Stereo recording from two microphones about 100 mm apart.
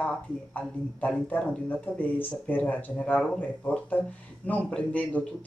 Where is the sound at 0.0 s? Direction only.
15° left (ahead or behind).